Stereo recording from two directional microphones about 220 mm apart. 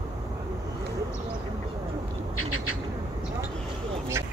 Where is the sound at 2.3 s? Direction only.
75° left (ahead or behind).